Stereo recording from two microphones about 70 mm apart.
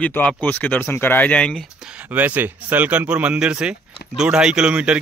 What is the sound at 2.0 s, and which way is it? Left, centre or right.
Speech, right.